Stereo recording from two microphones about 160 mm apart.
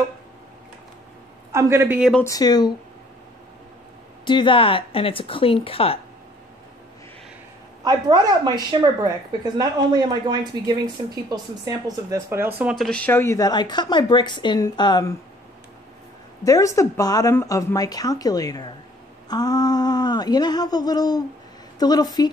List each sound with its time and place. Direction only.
1.5 s a man's voice: 15° right (ahead or behind)
2.0 s speech: centre (ahead or behind)
2.2 s a woman's voice: 25° left (ahead or behind)
4.2 s speech: 30° left (ahead or behind)
7.8 s speech: 25° right (ahead or behind)
12.7 s a woman's voice: 5° left (ahead or behind); by 15.1 s 25° left (ahead or behind)
16.4 s a woman's voice: 20° left (ahead or behind)